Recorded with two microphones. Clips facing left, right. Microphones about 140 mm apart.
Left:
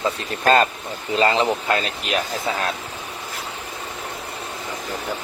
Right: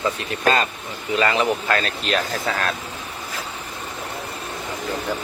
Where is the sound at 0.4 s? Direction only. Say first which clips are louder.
Left 3 dB; 45° left (ahead or behind).